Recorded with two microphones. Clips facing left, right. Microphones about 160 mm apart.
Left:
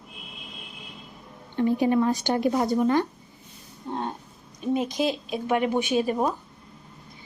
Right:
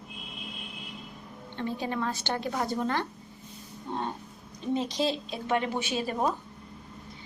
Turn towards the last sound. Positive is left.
turn(degrees=15)  # may be behind; listen again after turning